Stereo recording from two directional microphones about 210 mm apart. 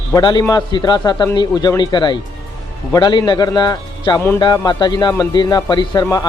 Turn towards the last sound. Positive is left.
turn(degrees=20)  # may be behind; listen again after turning